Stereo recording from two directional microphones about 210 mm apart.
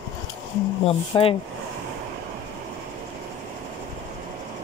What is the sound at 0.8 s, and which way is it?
Speech, 25° left (ahead or behind).